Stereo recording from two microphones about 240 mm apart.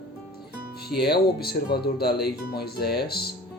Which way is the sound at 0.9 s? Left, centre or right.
Left.